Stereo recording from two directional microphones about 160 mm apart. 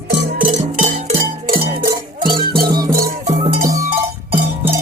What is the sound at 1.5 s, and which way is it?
Music, 70° right (ahead or behind).